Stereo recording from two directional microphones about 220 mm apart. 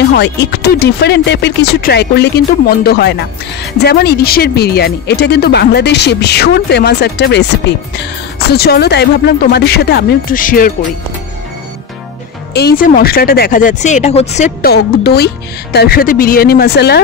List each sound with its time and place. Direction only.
0.1 s speech: 50° left (ahead or behind)
8.5 s speech: 45° left (ahead or behind)
12.5 s speech: 45° left (ahead or behind)
14.6 s speech: 45° left (ahead or behind)